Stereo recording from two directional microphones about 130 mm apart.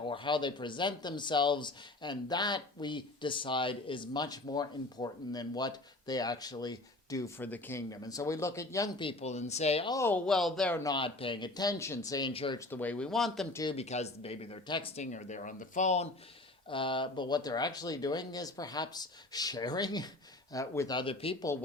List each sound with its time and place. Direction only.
0.0 s speech: 40° left (ahead or behind); by 8.9 s 25° left (ahead or behind)
9.0 s speech: 50° left (ahead or behind)
10.2 s speech: 5° left (ahead or behind)
10.9 s speech: 40° left (ahead or behind)
12.3 s speech: 45° left (ahead or behind)
12.5 s speech: 15° left (ahead or behind)
13.7 s speech: 55° left (ahead or behind); by 14.9 s 40° left (ahead or behind)
14.9 s speech: 70° left (ahead or behind)
16.6 s speech: 40° left (ahead or behind)